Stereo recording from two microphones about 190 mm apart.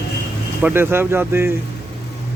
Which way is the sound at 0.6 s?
10° right (ahead or behind).